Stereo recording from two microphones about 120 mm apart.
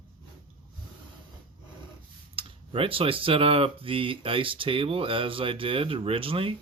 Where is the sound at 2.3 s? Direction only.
50° right (ahead or behind).